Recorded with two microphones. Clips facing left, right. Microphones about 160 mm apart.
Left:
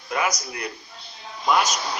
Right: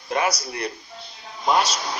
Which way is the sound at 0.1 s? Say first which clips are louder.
Right 2 dB; 30° right (ahead or behind).